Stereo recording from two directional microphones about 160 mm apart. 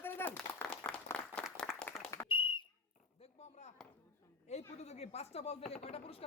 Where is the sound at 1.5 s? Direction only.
Centre (ahead or behind).